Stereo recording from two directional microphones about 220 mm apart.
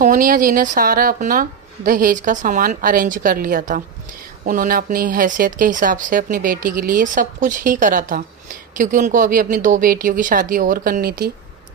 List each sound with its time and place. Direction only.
0.0 s speech: 40° right (ahead or behind)